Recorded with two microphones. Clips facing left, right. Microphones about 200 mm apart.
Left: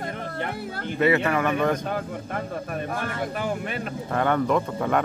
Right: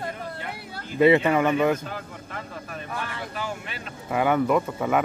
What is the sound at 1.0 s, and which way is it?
Speech, 20° right (ahead or behind).